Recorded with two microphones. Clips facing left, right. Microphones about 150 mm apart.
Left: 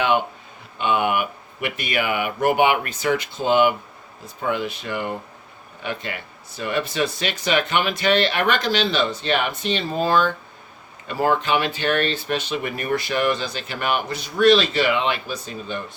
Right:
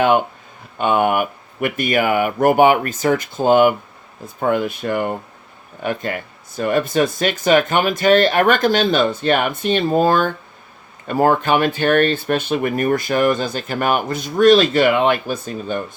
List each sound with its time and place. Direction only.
0.0 s speech: 45° right (ahead or behind)